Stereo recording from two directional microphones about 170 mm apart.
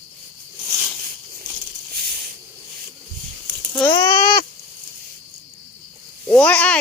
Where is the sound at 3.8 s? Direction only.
20° left (ahead or behind).